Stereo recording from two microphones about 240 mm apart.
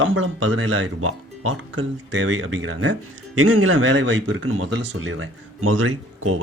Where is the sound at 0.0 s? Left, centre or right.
Right.